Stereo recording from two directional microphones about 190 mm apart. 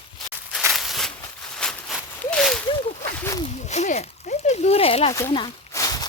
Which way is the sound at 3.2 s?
15° left (ahead or behind).